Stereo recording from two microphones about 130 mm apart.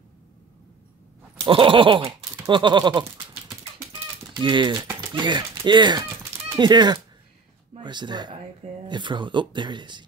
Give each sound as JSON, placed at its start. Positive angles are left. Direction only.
{"t": 1.4, "sound": "speech", "side_deg": -40}